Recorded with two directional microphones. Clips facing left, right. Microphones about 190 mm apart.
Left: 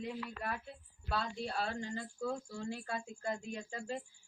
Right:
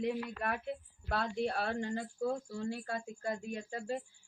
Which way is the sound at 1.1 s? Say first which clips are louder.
Right 4 dB; 60° right (ahead or behind).